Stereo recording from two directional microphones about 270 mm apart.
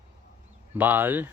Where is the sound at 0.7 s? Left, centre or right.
Centre.